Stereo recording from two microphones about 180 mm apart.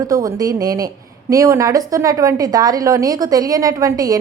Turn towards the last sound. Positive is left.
turn(degrees=-20)  # may be behind; listen again after turning